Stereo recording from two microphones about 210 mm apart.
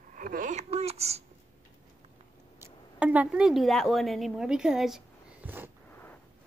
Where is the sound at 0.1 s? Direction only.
40° right (ahead or behind).